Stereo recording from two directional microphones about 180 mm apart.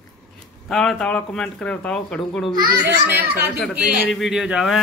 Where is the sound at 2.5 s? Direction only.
60° right (ahead or behind).